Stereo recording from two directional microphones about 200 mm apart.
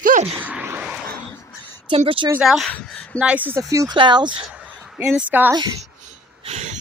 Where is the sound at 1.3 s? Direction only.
10° left (ahead or behind).